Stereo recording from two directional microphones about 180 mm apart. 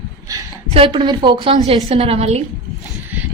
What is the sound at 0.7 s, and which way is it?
A woman's voice, 25° right (ahead or behind).